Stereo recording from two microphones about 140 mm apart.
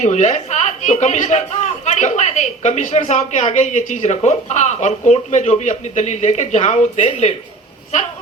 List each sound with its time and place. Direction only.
0.0 s a man's voice: 55° left (ahead or behind)